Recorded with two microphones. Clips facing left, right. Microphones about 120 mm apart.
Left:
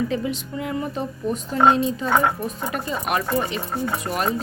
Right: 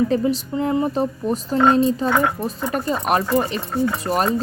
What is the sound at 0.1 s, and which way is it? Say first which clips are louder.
A woman's voice: right 6 dB; 40° right (ahead or behind).